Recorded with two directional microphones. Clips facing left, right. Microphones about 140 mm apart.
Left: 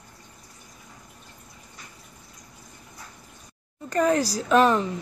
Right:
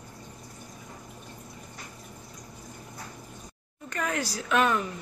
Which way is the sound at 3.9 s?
35° left (ahead or behind).